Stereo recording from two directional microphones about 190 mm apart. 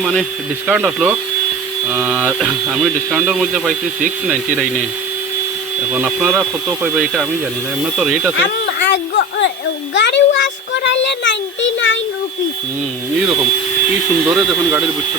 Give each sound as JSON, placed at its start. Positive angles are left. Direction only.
{"t": 0.0, "sound": "speech", "side_deg": 0}
{"t": 5.9, "sound": "speech", "side_deg": -5}
{"t": 8.4, "sound": "a sound", "side_deg": 65}
{"t": 9.9, "sound": "a child's voice", "side_deg": 65}
{"t": 14.3, "sound": "speech", "side_deg": 0}